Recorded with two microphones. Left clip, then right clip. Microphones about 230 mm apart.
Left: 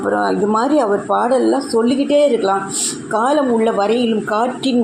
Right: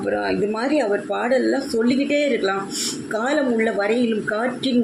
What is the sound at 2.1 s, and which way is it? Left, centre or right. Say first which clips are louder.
A woman's voice: left 7 dB; centre.